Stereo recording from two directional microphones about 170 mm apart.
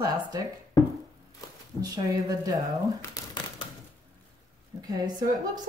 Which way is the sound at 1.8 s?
20° right (ahead or behind).